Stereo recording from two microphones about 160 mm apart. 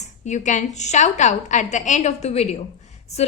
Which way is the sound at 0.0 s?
50° left (ahead or behind).